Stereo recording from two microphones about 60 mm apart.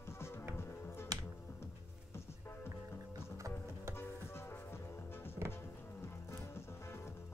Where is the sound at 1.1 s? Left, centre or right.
Right.